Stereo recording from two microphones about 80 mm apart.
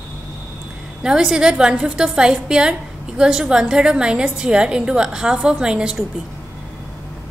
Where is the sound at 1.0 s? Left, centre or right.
Centre.